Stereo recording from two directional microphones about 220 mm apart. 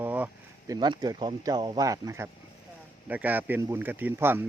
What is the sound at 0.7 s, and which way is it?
Speech, 20° right (ahead or behind).